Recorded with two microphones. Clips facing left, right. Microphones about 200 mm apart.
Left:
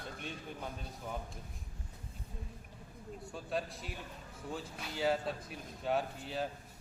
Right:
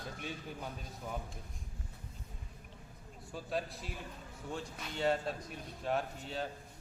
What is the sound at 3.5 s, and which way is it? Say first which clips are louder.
Speech: even; centre (ahead or behind).